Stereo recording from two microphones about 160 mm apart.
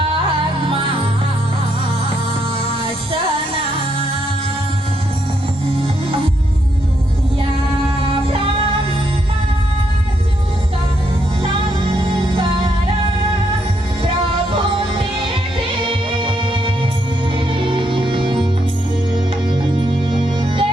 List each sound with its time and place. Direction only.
11.8 s music: 30° right (ahead or behind)
15.8 s music: 35° right (ahead or behind)
19.8 s music: 30° right (ahead or behind)